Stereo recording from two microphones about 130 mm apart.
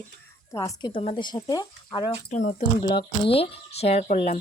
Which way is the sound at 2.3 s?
70° left (ahead or behind).